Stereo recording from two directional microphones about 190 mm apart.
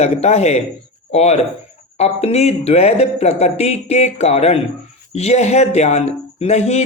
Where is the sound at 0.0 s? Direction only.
35° left (ahead or behind).